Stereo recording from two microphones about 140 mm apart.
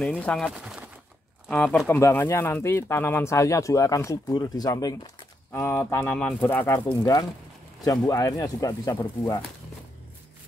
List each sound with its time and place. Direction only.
0.0 s speech: 5° left (ahead or behind)
0.5 s speech: 5° right (ahead or behind)
1.5 s speech: 10° left (ahead or behind)